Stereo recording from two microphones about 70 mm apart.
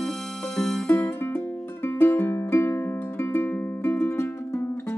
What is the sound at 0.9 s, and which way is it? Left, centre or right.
Music, left.